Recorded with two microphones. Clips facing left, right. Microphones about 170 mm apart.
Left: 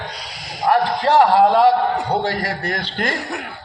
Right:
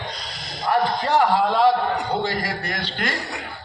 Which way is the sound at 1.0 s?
80° left.